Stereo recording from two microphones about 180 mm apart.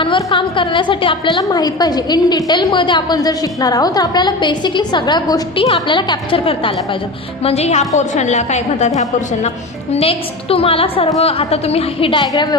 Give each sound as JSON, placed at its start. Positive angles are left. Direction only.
{"t": 0.0, "sound": "a woman's voice", "side_deg": 25}
{"t": 9.9, "sound": "a woman's voice", "side_deg": 35}